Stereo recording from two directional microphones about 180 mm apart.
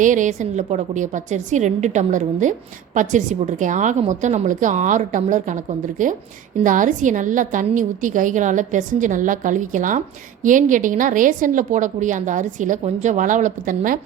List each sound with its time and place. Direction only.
0.0 s a woman's voice: 45° right (ahead or behind)